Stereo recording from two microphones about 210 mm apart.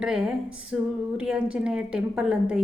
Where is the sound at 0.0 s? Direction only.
5° right (ahead or behind).